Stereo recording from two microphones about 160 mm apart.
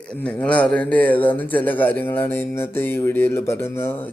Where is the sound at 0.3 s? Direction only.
10° left (ahead or behind).